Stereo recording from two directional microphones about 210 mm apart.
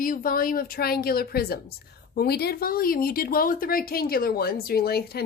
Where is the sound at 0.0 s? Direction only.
40° left (ahead or behind).